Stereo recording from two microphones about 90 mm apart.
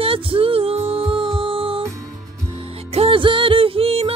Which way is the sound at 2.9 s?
80° right.